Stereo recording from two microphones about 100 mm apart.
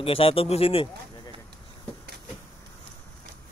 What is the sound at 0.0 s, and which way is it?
Speech, 70° left (ahead or behind).